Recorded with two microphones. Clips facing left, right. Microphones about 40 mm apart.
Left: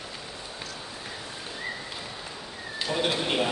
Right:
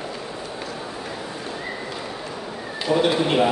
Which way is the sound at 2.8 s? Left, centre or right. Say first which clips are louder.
Right 8 dB; centre.